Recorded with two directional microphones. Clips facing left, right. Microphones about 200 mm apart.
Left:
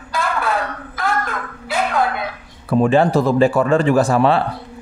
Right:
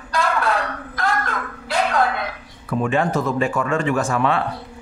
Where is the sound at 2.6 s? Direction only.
35° left (ahead or behind).